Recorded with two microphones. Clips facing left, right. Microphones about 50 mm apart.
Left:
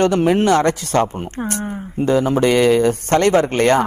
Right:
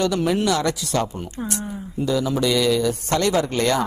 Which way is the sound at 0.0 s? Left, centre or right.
Left.